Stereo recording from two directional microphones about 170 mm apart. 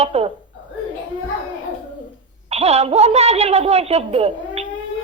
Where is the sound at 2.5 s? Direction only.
40° right (ahead or behind).